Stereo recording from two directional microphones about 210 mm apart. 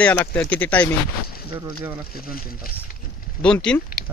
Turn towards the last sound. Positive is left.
turn(degrees=5)  # may be behind; listen again after turning